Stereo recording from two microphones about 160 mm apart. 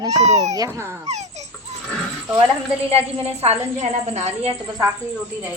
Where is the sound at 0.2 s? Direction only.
45° right (ahead or behind).